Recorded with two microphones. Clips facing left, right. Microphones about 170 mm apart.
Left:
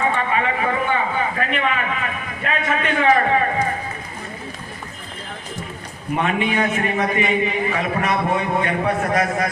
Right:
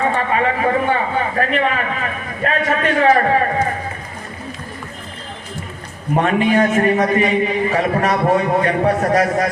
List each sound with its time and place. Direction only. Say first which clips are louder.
0.1 s a sound: right 3 dB; 40° right (ahead or behind)
1.4 s a man's voice: right 4 dB; 40° right (ahead or behind)
6.1 s a man's voice: right 6 dB; 40° right (ahead or behind)